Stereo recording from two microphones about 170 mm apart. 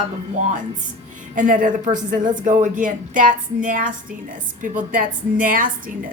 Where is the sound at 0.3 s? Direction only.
45° right (ahead or behind).